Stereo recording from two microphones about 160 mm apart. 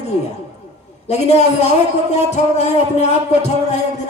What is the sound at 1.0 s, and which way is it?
A man's voice, 40° left (ahead or behind).